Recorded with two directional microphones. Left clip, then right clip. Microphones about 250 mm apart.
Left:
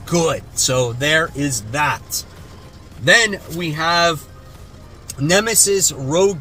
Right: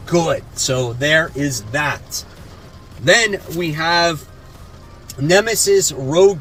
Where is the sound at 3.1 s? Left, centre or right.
Centre.